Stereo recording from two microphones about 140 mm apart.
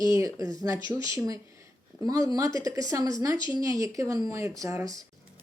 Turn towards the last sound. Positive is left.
turn(degrees=-20)  # may be behind; listen again after turning